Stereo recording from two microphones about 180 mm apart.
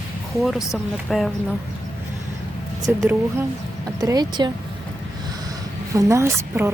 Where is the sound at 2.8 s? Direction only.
15° right (ahead or behind).